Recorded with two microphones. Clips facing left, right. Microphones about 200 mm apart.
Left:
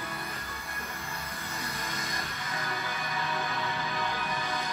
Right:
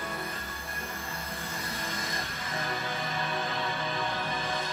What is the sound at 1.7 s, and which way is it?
Music, 25° right (ahead or behind).